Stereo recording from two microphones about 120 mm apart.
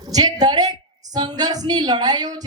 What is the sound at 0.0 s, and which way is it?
A woman's voice, 30° right (ahead or behind).